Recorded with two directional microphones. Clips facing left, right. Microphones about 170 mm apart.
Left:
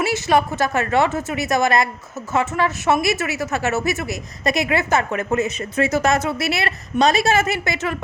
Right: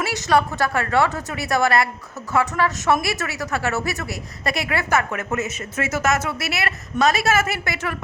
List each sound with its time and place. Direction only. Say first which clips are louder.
0.3 s speech: right 1 dB; 15° left (ahead or behind)